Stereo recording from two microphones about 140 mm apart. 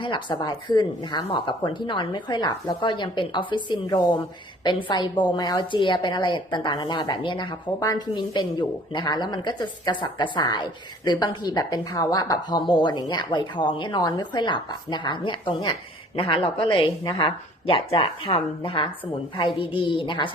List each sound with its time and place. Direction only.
0.0 s a woman's voice: 35° left (ahead or behind)